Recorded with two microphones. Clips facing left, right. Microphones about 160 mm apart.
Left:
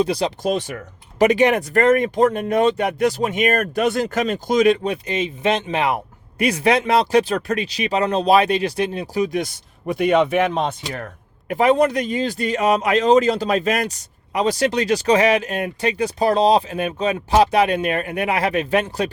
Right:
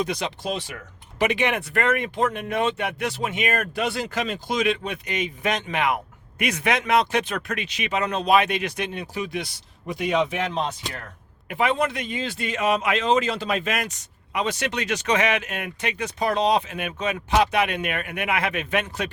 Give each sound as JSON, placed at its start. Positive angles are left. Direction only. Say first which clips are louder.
{"t": 0.0, "sound": "speech", "louder": "left 7 dB", "side_deg": 35}
{"t": 11.4, "sound": "speech", "louder": "left 7 dB", "side_deg": 40}